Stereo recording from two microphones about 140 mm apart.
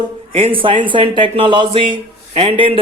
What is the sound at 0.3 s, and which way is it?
A man's voice, 40° right (ahead or behind).